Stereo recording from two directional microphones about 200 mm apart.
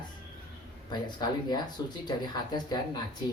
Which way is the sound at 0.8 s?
20° left (ahead or behind).